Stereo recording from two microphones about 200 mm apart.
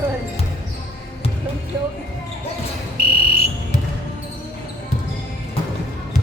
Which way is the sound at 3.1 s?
50° right (ahead or behind).